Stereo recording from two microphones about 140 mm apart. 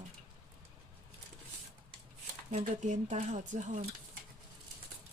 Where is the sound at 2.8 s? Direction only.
55° right (ahead or behind).